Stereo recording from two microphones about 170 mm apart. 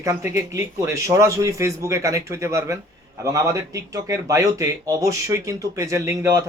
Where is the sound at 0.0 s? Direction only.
15° right (ahead or behind).